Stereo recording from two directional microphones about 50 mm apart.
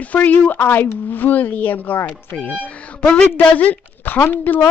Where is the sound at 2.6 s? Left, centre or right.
Left.